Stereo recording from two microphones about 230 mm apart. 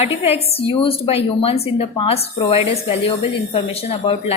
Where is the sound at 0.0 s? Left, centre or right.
Left.